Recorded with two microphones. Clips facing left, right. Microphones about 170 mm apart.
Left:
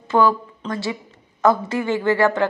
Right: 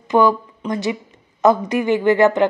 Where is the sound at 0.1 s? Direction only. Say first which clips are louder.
Right 2 dB; 15° right (ahead or behind).